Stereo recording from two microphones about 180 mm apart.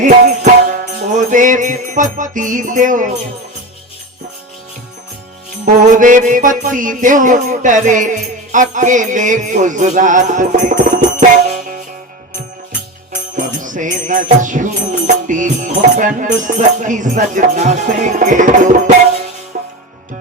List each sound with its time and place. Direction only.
0.0 s music: 45° right (ahead or behind)
6.0 s music: 45° right (ahead or behind)
13.3 s music: 45° right (ahead or behind)